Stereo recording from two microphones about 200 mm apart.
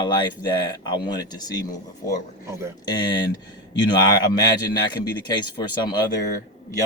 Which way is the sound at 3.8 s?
20° left (ahead or behind).